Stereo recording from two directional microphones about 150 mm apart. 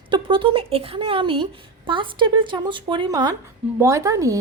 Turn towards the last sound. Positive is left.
turn(degrees=-20)  # may be behind; listen again after turning